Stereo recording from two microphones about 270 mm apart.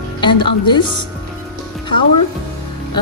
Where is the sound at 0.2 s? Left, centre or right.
Centre.